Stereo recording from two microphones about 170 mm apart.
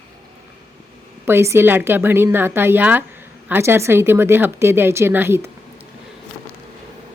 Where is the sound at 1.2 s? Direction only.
15° right (ahead or behind).